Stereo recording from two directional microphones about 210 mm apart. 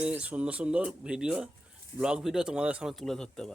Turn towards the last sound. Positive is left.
turn(degrees=5)  # may be behind; listen again after turning